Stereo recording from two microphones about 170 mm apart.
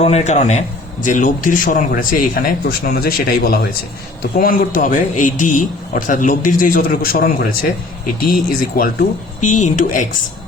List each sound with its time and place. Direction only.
0.0 s a man's voice: 40° left (ahead or behind)